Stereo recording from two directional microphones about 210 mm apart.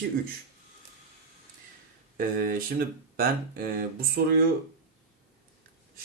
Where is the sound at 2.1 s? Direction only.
45° right (ahead or behind).